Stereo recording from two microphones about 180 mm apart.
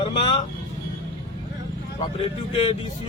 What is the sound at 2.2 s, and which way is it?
Speech, 30° left (ahead or behind).